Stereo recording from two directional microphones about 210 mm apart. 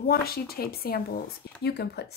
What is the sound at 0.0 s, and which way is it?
Speech, 45° left (ahead or behind).